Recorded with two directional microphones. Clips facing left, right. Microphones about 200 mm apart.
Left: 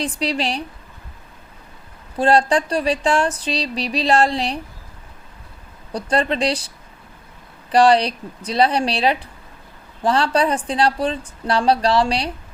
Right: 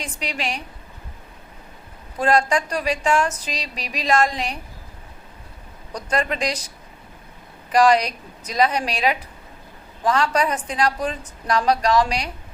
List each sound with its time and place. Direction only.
0.0 s speech: 35° left (ahead or behind)
2.1 s speech: 30° left (ahead or behind)
5.9 s speech: 30° left (ahead or behind)
7.7 s speech: 30° left (ahead or behind)